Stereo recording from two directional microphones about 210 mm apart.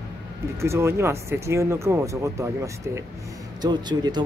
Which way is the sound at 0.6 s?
15° right (ahead or behind).